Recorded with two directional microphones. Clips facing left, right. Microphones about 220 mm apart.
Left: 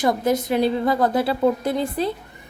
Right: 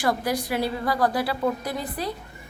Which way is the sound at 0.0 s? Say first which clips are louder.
Left 5 dB; 20° left (ahead or behind).